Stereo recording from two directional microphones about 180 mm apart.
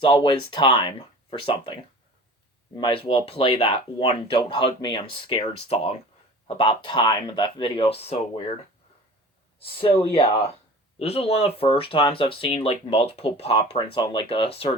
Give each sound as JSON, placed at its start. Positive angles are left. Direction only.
{"t": 0.0, "sound": "speech", "side_deg": 25}
{"t": 9.6, "sound": "speech", "side_deg": 30}